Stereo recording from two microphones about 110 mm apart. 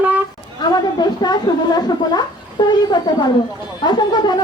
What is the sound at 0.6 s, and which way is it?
Speech, 40° left (ahead or behind).